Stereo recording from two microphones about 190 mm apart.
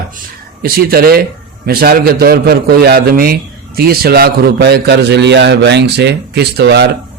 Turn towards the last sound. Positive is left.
turn(degrees=-65)  # may be behind; listen again after turning